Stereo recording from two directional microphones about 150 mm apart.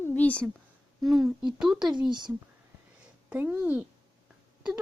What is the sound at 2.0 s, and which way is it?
Speech, 30° right (ahead or behind).